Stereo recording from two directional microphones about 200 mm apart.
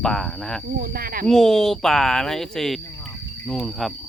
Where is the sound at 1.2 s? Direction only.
Centre (ahead or behind).